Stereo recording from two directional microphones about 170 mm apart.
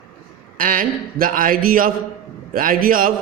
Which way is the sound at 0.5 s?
55° right (ahead or behind).